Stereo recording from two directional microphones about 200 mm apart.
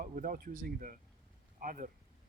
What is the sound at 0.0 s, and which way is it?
Speech, 45° right (ahead or behind).